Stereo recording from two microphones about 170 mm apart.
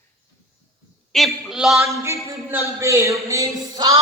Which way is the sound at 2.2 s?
15° right (ahead or behind).